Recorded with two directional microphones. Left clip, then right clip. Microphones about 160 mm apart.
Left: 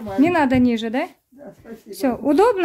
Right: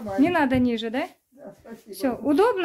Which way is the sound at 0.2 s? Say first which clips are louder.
Left 4 dB; 15° left (ahead or behind).